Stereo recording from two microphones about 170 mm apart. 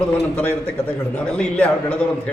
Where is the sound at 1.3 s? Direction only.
5° left (ahead or behind).